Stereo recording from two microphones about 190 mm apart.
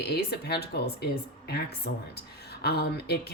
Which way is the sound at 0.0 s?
60° left (ahead or behind).